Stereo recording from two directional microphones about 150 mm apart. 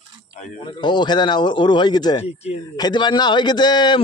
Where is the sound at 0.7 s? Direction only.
30° left (ahead or behind).